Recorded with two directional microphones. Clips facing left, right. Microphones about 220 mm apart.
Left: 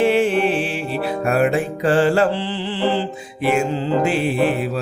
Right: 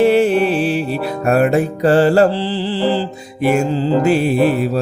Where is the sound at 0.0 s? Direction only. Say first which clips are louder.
Right 4 dB; 40° right (ahead or behind).